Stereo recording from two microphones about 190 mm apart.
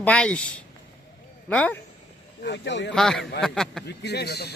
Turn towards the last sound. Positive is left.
turn(degrees=60)  # may be behind; listen again after turning